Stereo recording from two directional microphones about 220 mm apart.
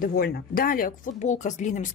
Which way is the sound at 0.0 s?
45° left (ahead or behind).